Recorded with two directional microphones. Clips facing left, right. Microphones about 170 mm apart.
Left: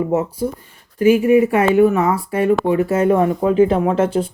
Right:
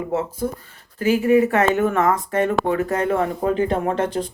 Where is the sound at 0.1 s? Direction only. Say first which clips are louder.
Left 4 dB; 20° left (ahead or behind).